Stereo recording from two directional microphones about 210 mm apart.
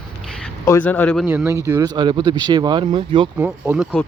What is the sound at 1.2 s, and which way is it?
Speech, 10° right (ahead or behind).